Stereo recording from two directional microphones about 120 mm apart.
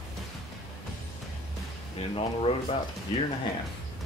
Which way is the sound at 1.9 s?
55° left (ahead or behind).